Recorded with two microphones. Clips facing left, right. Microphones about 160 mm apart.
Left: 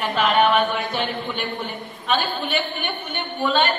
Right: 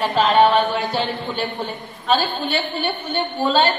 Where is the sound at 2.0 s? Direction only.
35° right (ahead or behind).